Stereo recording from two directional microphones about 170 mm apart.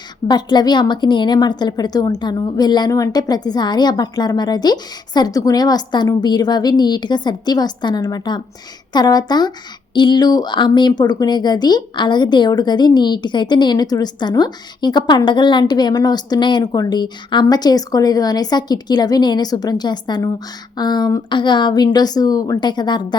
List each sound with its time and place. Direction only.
0.3 s speech: 25° left (ahead or behind)